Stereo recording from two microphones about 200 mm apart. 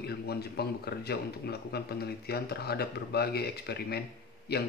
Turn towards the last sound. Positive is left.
turn(degrees=55)  # may be behind; listen again after turning